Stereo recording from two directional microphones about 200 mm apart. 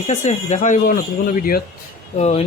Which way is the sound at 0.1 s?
35° left (ahead or behind).